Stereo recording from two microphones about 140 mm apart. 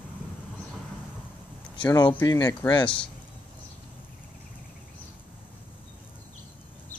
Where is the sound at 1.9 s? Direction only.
25° left (ahead or behind).